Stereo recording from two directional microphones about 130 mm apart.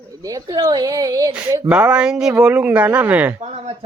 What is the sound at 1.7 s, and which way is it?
Speech, 10° right (ahead or behind).